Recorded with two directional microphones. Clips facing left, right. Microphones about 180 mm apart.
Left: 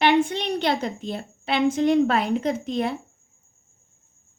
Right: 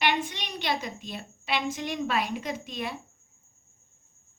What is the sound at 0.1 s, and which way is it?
A woman's voice, 60° left (ahead or behind).